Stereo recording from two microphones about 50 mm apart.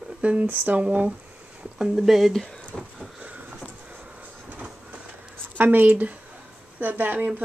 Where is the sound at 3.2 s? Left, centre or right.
Right.